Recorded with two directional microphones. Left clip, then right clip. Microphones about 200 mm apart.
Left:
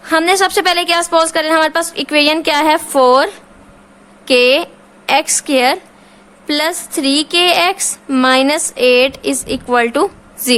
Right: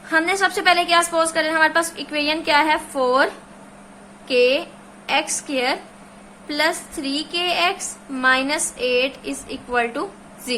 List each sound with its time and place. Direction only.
0.1 s a woman's voice: 55° left (ahead or behind)
4.3 s a woman's voice: 55° left (ahead or behind)